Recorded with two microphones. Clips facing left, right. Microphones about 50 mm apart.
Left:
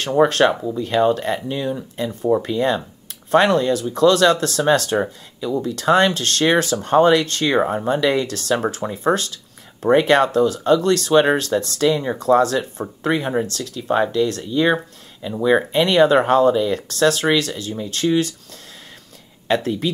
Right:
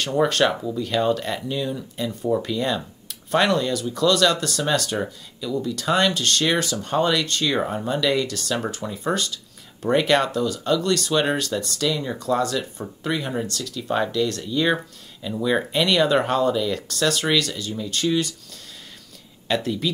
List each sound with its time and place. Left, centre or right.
0.1 s speech: left
7.5 s speech: left
9.8 s speech: left
12.2 s speech: left
13.0 s speech: left
15.9 s speech: left